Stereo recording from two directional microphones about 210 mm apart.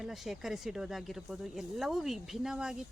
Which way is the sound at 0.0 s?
Centre (ahead or behind).